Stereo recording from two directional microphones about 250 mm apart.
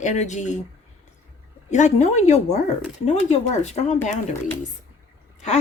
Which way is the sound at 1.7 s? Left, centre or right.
Left.